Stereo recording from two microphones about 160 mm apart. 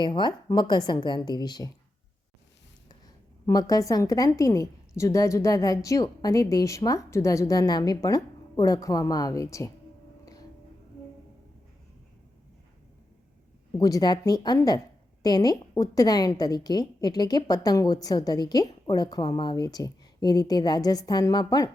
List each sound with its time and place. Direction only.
0.0 s a woman's voice: 30° left (ahead or behind)
3.4 s a woman's voice: 25° left (ahead or behind)
13.7 s a woman's voice: 25° left (ahead or behind)